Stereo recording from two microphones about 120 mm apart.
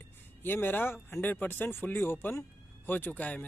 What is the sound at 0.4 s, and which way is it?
Speech, 15° left (ahead or behind).